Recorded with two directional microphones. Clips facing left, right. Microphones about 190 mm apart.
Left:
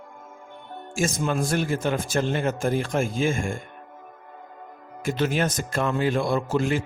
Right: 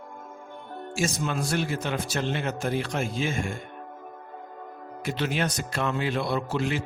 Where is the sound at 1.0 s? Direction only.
50° left (ahead or behind).